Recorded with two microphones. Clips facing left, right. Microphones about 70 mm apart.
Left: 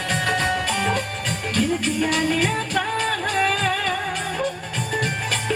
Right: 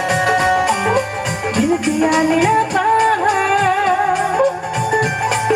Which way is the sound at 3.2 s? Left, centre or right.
Centre.